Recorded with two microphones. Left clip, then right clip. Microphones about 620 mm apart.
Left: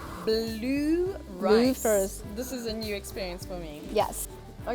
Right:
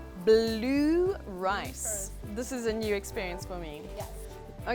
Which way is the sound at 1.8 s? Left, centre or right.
Left.